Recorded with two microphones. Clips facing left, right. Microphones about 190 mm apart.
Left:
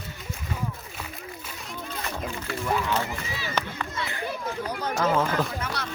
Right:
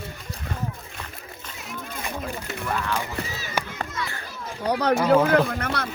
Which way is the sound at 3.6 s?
10° right (ahead or behind).